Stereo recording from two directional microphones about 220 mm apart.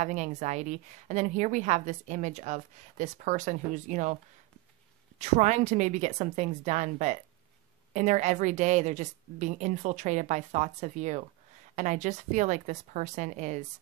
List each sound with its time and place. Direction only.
0.0 s a woman's voice: 35° right (ahead or behind)
5.2 s a woman's voice: 30° right (ahead or behind)